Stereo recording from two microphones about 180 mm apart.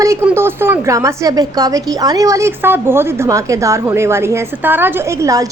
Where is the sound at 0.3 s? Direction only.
15° right (ahead or behind).